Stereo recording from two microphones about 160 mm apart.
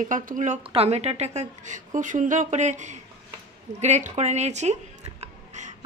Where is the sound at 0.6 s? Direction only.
35° right (ahead or behind).